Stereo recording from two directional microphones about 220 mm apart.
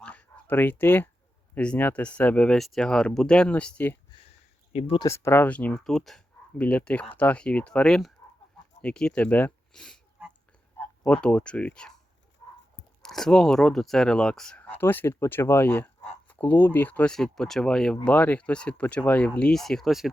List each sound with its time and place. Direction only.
0.0 s a sound: 5° left (ahead or behind)
1.5 s speech: 5° left (ahead or behind)
4.7 s speech: 25° left (ahead or behind)
5.0 s speech: 10° left (ahead or behind)
13.0 s speech: centre (ahead or behind)